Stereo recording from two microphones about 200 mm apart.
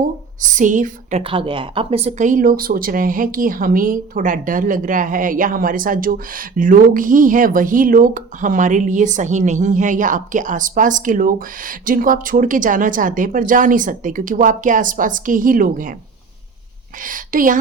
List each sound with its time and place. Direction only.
0.4 s speech: 40° right (ahead or behind)
1.2 s speech: 25° right (ahead or behind); by 16.0 s 45° right (ahead or behind)
17.0 s speech: 40° right (ahead or behind)